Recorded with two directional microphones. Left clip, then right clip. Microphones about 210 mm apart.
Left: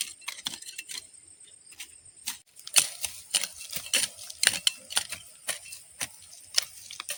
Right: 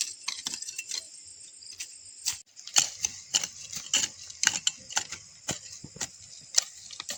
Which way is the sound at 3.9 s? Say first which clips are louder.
Even; 15° left (ahead or behind).